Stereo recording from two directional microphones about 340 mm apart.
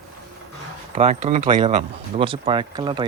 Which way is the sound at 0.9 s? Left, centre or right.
Centre.